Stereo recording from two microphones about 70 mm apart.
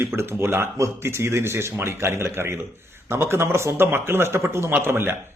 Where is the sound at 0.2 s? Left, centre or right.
Right.